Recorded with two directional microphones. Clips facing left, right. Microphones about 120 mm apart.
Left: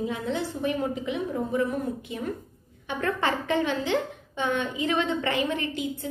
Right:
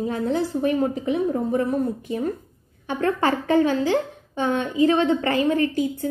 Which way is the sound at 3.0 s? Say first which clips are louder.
Right 5 dB; 40° right (ahead or behind).